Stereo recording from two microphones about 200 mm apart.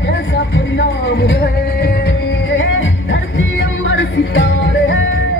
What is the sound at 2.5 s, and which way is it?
Music, 75° left (ahead or behind).